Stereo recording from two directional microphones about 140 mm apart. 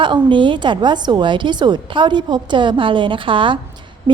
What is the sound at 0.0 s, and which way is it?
A woman's voice, 35° right (ahead or behind).